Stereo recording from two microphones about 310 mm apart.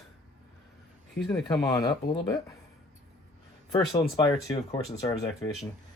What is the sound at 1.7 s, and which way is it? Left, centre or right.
Speech, centre.